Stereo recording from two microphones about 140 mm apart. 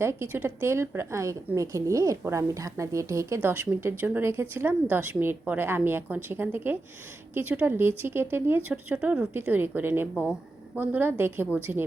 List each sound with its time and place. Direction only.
0.0 s a woman's voice: 20° right (ahead or behind)